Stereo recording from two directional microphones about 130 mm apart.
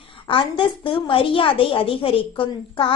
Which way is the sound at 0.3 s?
40° left (ahead or behind).